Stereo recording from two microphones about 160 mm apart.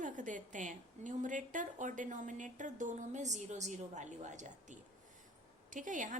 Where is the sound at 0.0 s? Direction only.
55° right (ahead or behind).